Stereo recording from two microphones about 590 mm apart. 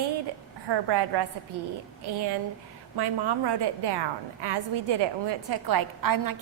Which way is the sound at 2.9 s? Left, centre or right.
Right.